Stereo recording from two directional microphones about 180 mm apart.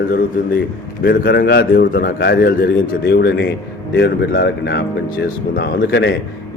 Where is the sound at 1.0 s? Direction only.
55° left (ahead or behind); by 4.8 s 70° left (ahead or behind).